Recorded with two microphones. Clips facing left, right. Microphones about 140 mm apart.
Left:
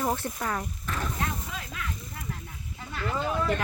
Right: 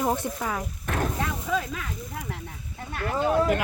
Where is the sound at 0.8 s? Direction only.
60° right (ahead or behind).